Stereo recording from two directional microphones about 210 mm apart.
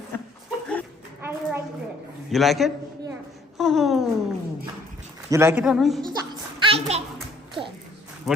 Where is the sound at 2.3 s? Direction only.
Centre (ahead or behind).